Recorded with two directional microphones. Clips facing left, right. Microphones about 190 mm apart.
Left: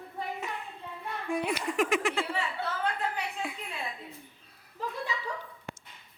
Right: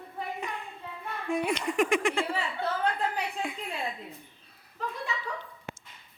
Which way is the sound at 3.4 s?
5° left (ahead or behind).